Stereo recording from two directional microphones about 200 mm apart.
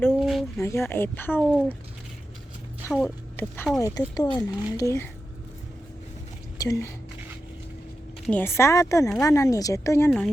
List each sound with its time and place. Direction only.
0.1 s a sound: centre (ahead or behind)
0.6 s speech: 15° left (ahead or behind)
2.9 s speech: 5° left (ahead or behind)
6.6 s speech: 15° left (ahead or behind)
8.3 s speech: 10° left (ahead or behind)